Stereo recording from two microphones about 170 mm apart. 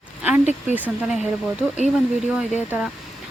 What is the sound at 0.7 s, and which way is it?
Speech, 10° right (ahead or behind).